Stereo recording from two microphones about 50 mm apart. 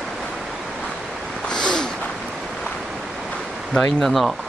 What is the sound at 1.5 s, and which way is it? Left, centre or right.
Snort, centre.